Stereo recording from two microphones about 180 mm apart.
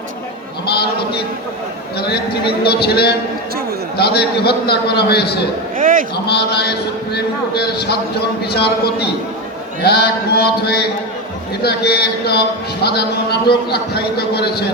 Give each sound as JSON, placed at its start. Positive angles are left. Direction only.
{"t": 2.0, "sound": "a man's voice", "side_deg": 65}
{"t": 5.7, "sound": "a sound", "side_deg": -50}
{"t": 6.2, "sound": "a man's voice", "side_deg": 65}